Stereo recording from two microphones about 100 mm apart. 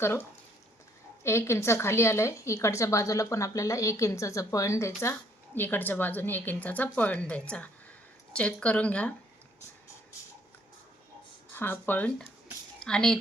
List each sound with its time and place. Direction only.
0.0 s a woman's voice: 25° left (ahead or behind)
11.5 s a woman's voice: 20° left (ahead or behind)